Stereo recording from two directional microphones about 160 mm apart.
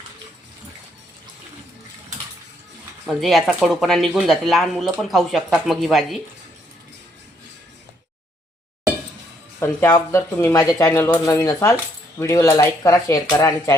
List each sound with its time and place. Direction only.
3.1 s speech: centre (ahead or behind)
9.6 s speech: 15° left (ahead or behind)